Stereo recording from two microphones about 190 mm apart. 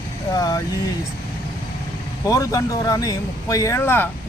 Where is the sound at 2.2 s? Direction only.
15° left (ahead or behind).